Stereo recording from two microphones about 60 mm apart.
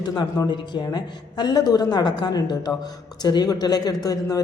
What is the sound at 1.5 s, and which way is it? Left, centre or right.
Speech, left.